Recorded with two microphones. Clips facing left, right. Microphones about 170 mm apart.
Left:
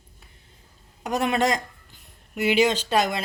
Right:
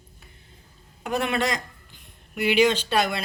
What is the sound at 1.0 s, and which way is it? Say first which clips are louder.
Speech: left 2 dB; 40° left (ahead or behind).